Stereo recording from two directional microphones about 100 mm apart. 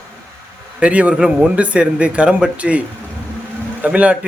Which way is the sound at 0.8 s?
10° right (ahead or behind).